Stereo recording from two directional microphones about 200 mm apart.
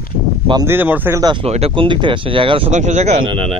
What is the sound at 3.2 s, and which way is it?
Speech, 90° right.